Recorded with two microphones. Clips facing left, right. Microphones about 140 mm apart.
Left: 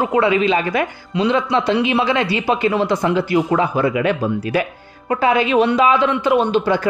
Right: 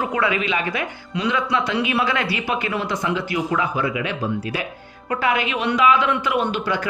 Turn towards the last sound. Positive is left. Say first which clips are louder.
# left 6 dB
turn(degrees=30)  # may be behind; listen again after turning